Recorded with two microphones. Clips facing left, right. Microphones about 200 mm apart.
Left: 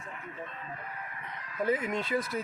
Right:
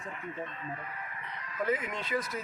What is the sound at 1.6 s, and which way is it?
Speech, 30° left (ahead or behind).